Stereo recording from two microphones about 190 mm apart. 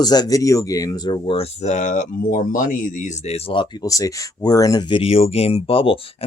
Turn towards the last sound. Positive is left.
turn(degrees=30)  # may be behind; listen again after turning